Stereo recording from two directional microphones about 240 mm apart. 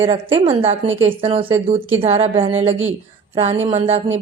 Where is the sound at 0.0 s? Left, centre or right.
Right.